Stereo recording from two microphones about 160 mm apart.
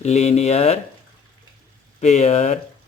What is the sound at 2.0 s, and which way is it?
Speech, 45° left (ahead or behind).